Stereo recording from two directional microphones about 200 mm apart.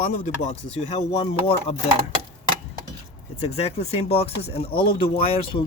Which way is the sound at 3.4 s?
30° left (ahead or behind).